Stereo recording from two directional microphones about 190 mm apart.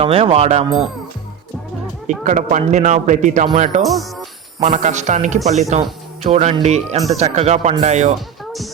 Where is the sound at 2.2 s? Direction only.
40° right (ahead or behind).